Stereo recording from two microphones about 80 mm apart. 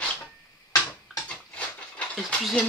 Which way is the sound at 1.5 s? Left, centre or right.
Centre.